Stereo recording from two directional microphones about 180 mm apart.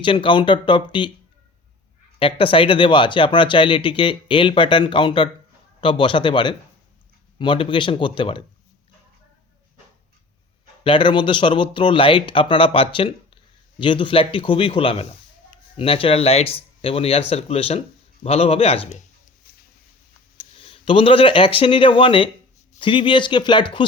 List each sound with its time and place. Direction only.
0.0 s speech: 25° left (ahead or behind)
2.1 s speech: 30° left (ahead or behind)
10.8 s speech: 25° left (ahead or behind)
19.4 s a sound: 55° left (ahead or behind)
20.3 s speech: 40° left (ahead or behind)